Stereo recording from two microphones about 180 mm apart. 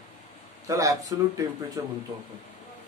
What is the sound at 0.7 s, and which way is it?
Speech, 20° right (ahead or behind).